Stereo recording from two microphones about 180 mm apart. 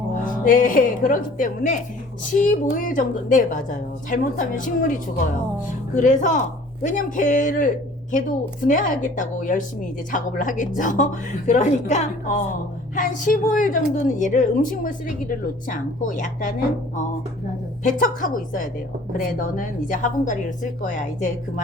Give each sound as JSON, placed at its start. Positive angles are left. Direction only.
{"t": 0.3, "sound": "a woman's voice", "side_deg": 50}
{"t": 17.8, "sound": "a woman's voice", "side_deg": 50}